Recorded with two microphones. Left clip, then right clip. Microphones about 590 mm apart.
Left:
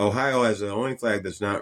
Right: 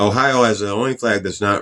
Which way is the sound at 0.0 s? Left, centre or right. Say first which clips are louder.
Right 7 dB; left.